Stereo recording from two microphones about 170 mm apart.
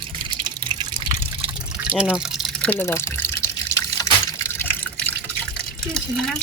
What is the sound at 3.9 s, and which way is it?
Water, 15° left (ahead or behind).